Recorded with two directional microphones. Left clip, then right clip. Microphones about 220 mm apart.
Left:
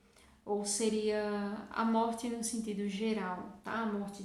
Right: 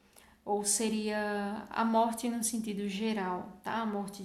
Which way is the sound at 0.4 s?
40° right (ahead or behind).